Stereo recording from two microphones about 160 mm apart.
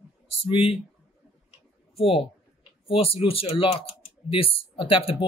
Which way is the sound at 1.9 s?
35° left (ahead or behind).